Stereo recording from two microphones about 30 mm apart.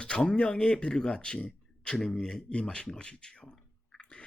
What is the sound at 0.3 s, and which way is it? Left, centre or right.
Speech, left.